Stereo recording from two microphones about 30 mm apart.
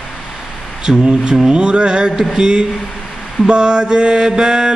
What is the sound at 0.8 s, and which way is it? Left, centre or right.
Mantra, right.